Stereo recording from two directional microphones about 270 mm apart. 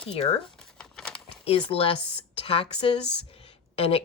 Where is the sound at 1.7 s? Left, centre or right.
Centre.